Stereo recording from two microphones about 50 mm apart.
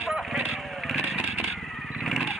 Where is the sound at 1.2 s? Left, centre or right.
Centre.